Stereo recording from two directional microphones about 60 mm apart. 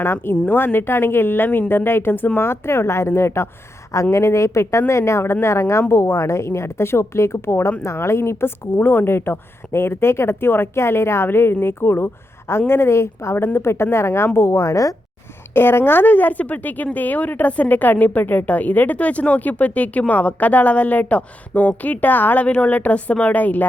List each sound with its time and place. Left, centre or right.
0.0 s speech: left
2.4 s speech: left
4.1 s speech: left
15.5 s speech: left